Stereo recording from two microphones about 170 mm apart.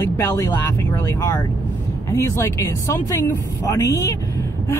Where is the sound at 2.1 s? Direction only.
20° left (ahead or behind).